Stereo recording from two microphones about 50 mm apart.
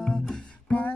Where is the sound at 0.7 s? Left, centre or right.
Left.